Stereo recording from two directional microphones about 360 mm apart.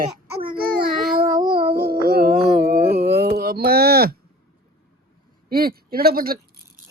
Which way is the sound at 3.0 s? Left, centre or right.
Right.